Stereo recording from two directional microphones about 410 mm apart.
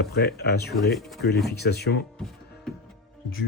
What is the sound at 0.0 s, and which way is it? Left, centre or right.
Speech, left.